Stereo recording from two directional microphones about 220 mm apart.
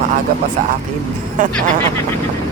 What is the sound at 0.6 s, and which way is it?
Speech, 35° right (ahead or behind).